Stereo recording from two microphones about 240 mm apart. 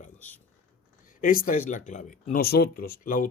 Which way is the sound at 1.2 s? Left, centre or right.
Left.